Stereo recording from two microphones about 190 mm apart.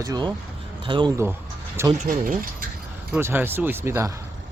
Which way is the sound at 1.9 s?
40° right (ahead or behind).